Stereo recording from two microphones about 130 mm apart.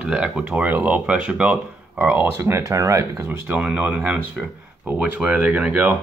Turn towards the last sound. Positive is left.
turn(degrees=-10)  # may be behind; listen again after turning